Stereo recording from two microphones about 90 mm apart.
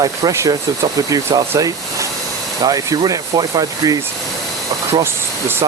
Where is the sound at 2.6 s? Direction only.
40° right (ahead or behind).